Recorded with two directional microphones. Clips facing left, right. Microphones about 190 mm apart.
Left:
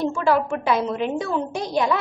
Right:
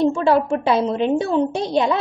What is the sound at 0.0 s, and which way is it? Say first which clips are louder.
A woman's voice: right 4 dB; 25° right (ahead or behind).